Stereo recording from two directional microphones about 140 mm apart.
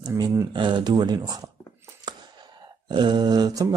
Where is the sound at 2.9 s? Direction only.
30° right (ahead or behind).